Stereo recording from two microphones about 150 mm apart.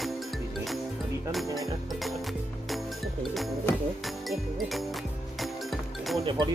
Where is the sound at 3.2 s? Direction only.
Centre (ahead or behind).